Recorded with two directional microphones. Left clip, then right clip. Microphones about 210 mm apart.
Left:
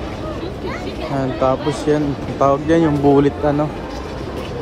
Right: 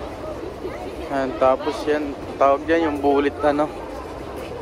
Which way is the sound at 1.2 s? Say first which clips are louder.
Even; 15° left (ahead or behind).